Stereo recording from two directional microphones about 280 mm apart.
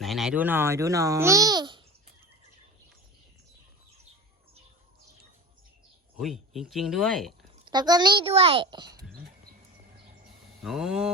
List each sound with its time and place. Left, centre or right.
0.0 s a child's voice: centre
6.1 s speech: centre
7.6 s a child's voice: centre
10.6 s speech: centre